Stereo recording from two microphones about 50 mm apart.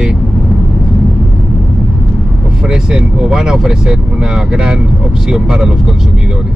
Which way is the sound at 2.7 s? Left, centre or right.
Centre.